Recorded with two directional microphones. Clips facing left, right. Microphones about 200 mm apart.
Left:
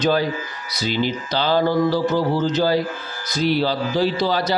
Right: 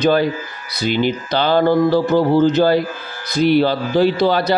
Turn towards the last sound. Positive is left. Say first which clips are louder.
# right 5 dB
turn(degrees=-60)  # may be behind; listen again after turning